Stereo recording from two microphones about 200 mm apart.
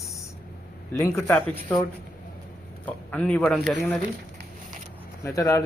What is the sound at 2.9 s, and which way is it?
Speech, 5° left (ahead or behind).